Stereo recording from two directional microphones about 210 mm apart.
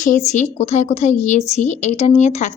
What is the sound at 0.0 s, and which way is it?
A woman's voice, 35° left (ahead or behind).